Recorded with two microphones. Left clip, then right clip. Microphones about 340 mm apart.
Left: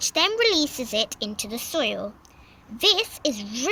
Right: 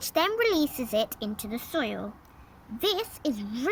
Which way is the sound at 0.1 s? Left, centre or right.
Centre.